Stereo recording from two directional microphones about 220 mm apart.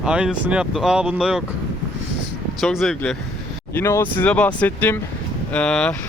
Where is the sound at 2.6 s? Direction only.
Centre (ahead or behind).